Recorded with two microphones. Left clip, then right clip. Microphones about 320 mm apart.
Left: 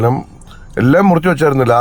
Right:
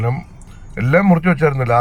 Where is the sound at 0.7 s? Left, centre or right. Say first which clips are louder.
Left 4 dB; left.